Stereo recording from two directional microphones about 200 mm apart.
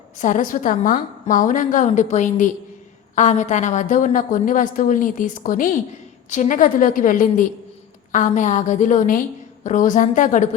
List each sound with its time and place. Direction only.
0.2 s a woman's voice: 40° left (ahead or behind)